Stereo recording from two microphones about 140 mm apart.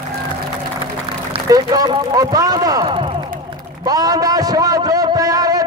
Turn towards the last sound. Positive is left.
turn(degrees=-25)  # may be behind; listen again after turning